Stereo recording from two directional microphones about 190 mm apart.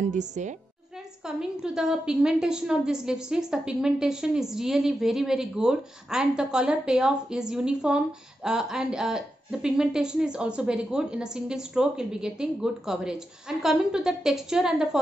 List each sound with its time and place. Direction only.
0.1 s a woman's voice: 40° right (ahead or behind)
1.2 s a woman's voice: 5° right (ahead or behind)